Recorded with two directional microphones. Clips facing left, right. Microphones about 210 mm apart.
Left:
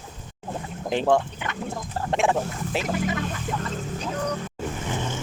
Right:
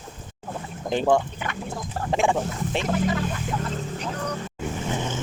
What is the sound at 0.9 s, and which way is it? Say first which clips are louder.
Speech: even; centre (ahead or behind).